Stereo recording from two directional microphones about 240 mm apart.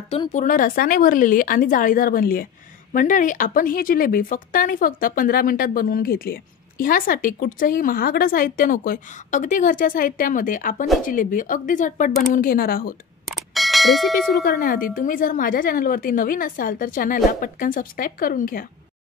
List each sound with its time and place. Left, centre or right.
0.1 s speech: left
13.3 s bell: centre
14.4 s speech: left